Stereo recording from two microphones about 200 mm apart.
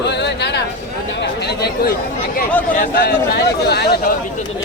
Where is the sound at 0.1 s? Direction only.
60° left (ahead or behind).